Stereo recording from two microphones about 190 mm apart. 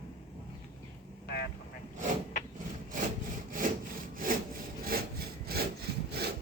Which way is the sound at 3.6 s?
45° right (ahead or behind).